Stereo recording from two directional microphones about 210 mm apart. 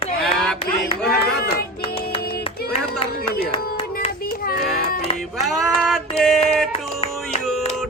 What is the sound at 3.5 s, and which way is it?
Clapping, 25° left (ahead or behind).